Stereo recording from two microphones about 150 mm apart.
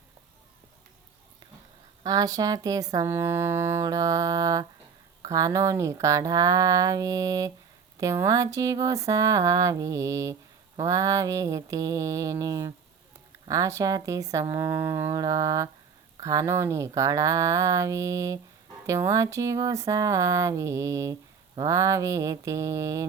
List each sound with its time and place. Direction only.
2.0 s speech: 25° right (ahead or behind)